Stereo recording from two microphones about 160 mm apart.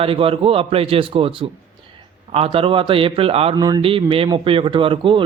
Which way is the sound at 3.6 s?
25° right (ahead or behind).